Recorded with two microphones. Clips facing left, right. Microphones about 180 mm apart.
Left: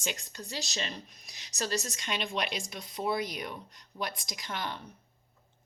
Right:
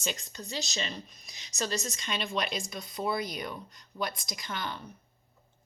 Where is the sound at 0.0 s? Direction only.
10° left (ahead or behind).